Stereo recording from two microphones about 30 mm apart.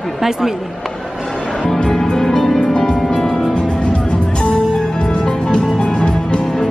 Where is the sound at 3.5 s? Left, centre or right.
Left.